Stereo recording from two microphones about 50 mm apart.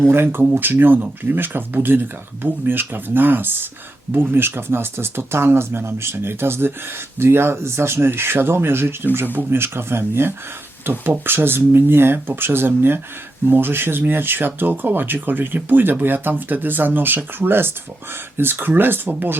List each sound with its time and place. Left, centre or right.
0.1 s speech: right
9.6 s speech: right